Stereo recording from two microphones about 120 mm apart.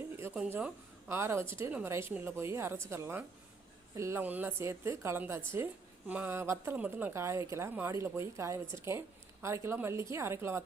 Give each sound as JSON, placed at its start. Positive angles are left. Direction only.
{"t": 0.2, "sound": "a woman's voice", "side_deg": -15}